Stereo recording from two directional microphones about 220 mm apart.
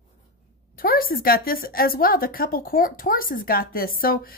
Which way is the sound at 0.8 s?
40° left (ahead or behind).